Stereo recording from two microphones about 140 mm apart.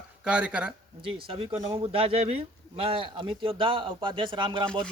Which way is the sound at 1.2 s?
40° right (ahead or behind).